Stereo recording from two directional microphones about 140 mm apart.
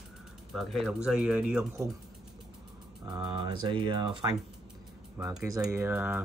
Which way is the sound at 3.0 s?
30° right (ahead or behind).